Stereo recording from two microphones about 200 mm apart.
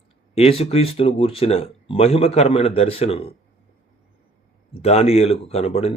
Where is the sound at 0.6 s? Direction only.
30° left (ahead or behind).